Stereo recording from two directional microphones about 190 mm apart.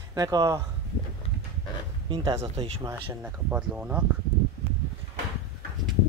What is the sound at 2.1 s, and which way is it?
Speech, 20° right (ahead or behind).